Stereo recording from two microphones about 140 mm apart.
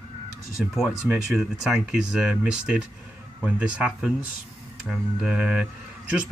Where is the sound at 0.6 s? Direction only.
5° right (ahead or behind).